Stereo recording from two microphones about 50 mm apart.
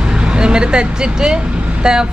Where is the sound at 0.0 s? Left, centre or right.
Centre.